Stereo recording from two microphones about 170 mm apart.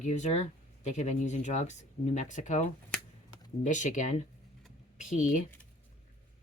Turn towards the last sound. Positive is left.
turn(degrees=50)  # may be behind; listen again after turning